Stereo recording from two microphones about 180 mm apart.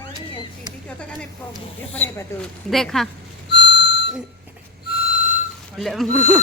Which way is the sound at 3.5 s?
70° left (ahead or behind).